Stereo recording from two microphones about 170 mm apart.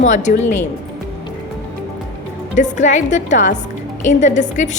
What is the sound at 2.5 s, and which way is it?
A woman's voice, 45° left (ahead or behind).